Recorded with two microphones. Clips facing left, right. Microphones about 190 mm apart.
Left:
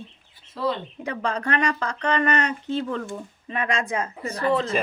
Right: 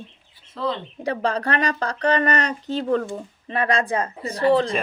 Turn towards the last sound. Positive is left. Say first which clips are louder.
# right 5 dB
turn(degrees=-30)  # may be behind; listen again after turning